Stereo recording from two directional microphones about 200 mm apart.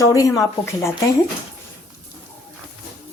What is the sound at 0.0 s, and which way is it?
Speech, 15° left (ahead or behind).